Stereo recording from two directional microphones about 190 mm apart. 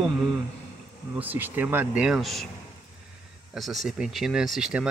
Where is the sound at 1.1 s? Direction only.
10° right (ahead or behind).